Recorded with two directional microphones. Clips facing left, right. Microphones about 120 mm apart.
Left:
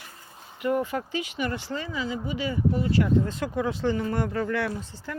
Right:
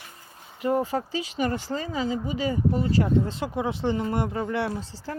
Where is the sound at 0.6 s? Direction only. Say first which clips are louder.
Right 1 dB; 35° right (ahead or behind).